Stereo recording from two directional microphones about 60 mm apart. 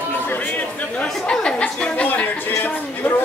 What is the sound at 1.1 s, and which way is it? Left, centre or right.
Chatter, centre.